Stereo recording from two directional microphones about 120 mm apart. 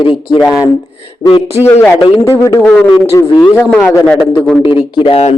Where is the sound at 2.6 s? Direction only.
10° left (ahead or behind).